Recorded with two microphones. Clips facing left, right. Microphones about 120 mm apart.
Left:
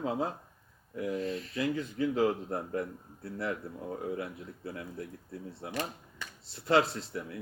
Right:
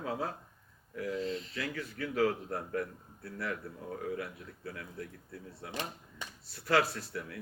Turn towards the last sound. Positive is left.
turn(degrees=25)  # may be behind; listen again after turning